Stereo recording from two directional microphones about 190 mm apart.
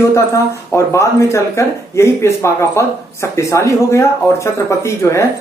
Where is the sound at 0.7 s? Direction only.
15° left (ahead or behind).